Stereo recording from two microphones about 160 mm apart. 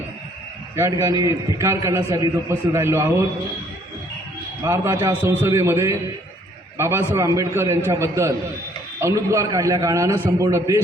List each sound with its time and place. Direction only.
0.8 s a man's voice: 20° right (ahead or behind)
4.6 s a man's voice: 15° right (ahead or behind)